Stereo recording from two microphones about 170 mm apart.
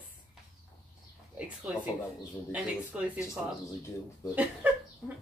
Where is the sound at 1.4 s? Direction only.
5° right (ahead or behind).